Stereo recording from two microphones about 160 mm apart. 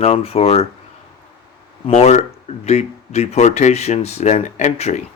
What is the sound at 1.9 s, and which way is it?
Speech, 45° left (ahead or behind).